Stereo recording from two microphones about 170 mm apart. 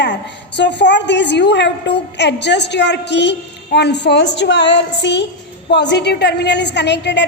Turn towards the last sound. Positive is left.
turn(degrees=90)